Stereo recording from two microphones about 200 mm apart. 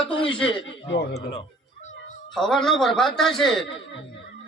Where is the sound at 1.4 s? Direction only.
35° left (ahead or behind).